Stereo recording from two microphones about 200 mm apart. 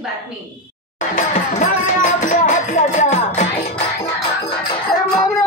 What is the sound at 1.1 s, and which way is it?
Music, 40° left (ahead or behind).